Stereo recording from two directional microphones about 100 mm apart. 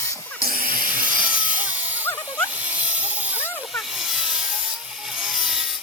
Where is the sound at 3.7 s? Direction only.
Centre (ahead or behind).